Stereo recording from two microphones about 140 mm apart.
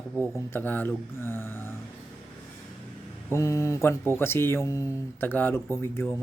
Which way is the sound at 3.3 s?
20° left (ahead or behind).